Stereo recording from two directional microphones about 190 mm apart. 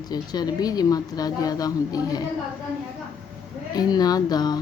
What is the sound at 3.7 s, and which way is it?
Speech, 20° left (ahead or behind).